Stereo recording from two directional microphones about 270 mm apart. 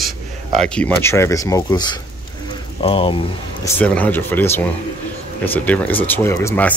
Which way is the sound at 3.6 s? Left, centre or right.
Centre.